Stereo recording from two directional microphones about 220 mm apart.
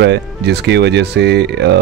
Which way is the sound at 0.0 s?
50° right (ahead or behind).